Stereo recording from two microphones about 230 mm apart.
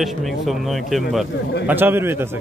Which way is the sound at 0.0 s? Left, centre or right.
Centre.